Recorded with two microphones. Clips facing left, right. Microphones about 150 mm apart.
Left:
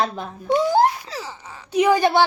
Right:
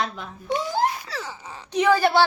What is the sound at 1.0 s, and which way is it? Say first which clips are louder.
A woman's voice: left 1 dB; 15° left (ahead or behind).